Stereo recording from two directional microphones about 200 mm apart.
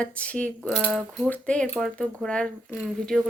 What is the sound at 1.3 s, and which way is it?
Speech, 5° left (ahead or behind).